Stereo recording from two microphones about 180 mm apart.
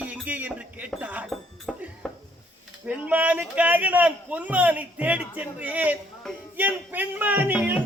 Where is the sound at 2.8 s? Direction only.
10° right (ahead or behind).